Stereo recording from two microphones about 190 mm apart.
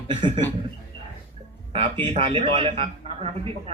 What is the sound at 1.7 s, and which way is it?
A man's voice, 25° right (ahead or behind).